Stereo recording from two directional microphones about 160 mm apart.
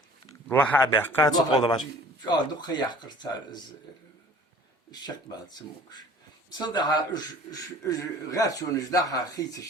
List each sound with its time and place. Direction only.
0.4 s a man's voice: 10° left (ahead or behind); by 3.6 s 25° left (ahead or behind)
4.9 s a man's voice: 25° left (ahead or behind)